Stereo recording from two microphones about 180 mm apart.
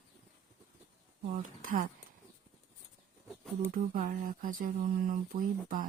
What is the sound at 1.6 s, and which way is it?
Speech, 50° right (ahead or behind).